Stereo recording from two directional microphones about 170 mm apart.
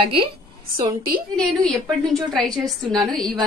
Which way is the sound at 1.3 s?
5° left (ahead or behind).